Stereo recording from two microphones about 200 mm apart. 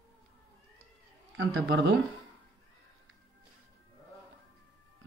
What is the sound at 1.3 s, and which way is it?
Speech, 75° right (ahead or behind).